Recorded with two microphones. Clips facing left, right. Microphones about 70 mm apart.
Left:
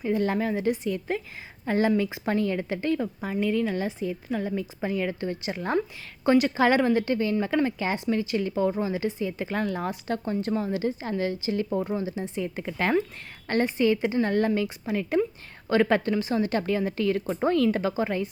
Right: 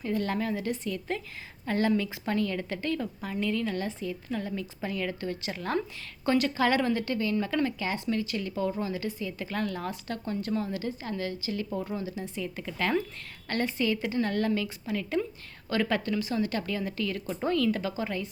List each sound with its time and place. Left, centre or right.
0.0 s a woman's voice: centre